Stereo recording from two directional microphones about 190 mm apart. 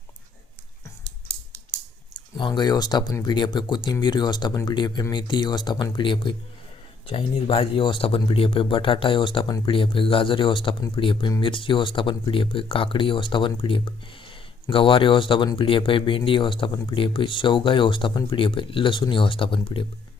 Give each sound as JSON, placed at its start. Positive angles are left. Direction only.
{"t": 2.4, "sound": "speech", "side_deg": 20}